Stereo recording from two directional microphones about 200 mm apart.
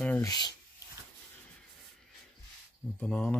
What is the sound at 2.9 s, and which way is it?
Speech, 5° left (ahead or behind).